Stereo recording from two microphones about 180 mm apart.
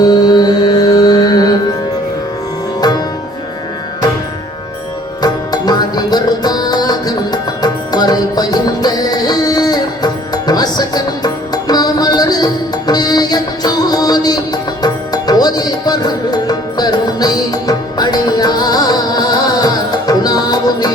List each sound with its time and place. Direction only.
0.0 s music: 20° left (ahead or behind)
2.8 s music: 20° left (ahead or behind)
5.2 s music: 20° left (ahead or behind)